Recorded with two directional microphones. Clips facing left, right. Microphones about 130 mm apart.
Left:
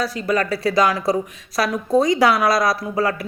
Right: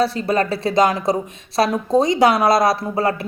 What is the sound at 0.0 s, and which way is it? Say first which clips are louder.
Speech: right 3 dB; 30° right (ahead or behind).